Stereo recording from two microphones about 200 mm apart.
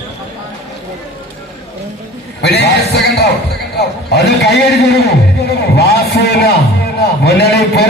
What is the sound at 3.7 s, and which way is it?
A man's voice, 55° left (ahead or behind).